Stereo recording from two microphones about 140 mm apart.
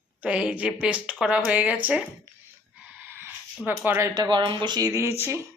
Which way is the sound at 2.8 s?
15° right (ahead or behind).